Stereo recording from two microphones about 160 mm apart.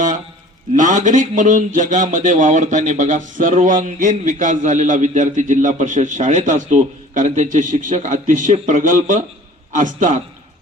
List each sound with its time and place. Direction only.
0.7 s a man's voice: 50° right (ahead or behind)